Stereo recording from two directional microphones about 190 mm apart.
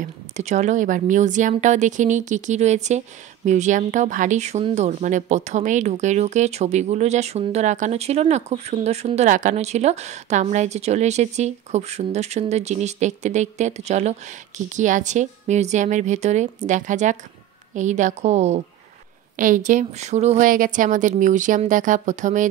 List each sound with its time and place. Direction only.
0.0 s speech: 35° right (ahead or behind)